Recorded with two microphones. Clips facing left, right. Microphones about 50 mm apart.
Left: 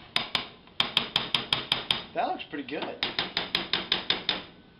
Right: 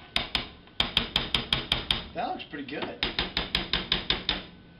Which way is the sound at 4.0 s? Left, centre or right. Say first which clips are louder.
Even; centre.